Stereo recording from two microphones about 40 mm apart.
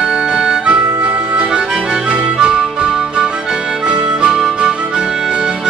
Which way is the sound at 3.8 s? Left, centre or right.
Right.